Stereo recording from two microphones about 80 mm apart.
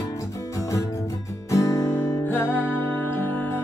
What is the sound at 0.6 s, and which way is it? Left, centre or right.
Music, left.